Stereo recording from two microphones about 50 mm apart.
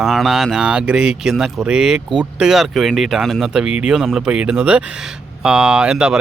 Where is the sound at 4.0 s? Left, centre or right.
Centre.